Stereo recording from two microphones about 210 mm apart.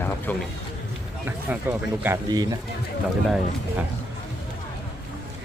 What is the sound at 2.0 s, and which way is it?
Speech, 15° right (ahead or behind).